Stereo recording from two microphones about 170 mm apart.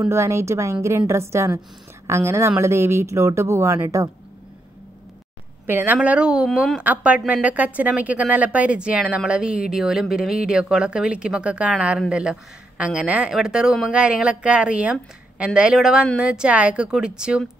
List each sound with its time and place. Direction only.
0.0 s speech: 15° right (ahead or behind)
5.7 s a woman's voice: 10° right (ahead or behind)